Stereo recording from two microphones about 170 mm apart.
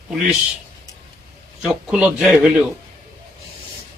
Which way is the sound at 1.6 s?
5° right (ahead or behind).